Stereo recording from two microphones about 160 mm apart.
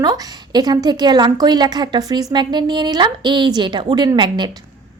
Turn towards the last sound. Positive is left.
turn(degrees=-25)  # may be behind; listen again after turning